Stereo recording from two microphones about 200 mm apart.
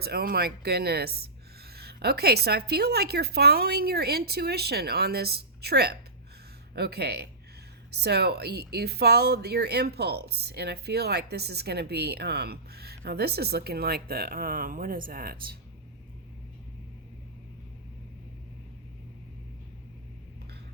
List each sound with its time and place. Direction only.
0.0 s speech: 50° right (ahead or behind)